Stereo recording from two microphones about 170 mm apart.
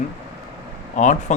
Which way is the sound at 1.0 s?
45° left (ahead or behind).